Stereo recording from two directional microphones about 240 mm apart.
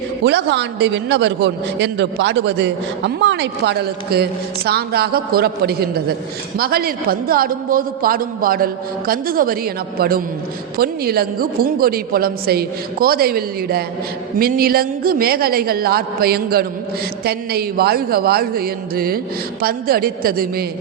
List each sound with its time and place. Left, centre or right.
0.3 s a man's voice: right